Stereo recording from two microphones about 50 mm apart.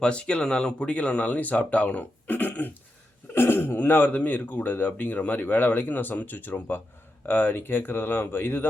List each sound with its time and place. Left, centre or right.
0.0 s speech: left
3.3 s speech: left